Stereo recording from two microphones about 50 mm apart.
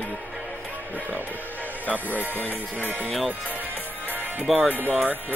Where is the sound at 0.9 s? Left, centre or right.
Right.